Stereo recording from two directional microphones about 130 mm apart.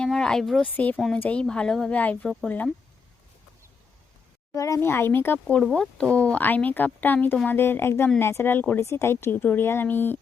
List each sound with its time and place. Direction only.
0.0 s a woman's voice: 5° left (ahead or behind)
0.9 s a woman's voice: centre (ahead or behind)
4.5 s a woman's voice: 25° left (ahead or behind)